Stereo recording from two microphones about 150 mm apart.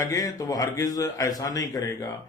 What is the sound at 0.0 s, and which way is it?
Speech, 25° left (ahead or behind).